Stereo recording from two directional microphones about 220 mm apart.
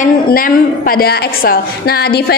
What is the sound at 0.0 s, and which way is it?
A woman's voice, 40° left (ahead or behind).